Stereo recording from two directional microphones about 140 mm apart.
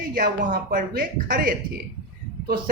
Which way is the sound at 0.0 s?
85° right.